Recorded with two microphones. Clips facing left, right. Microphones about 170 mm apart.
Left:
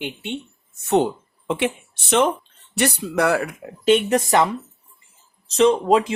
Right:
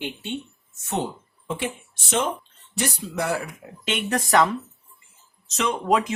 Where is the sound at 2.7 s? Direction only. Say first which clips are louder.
Left 6 dB; 70° left (ahead or behind).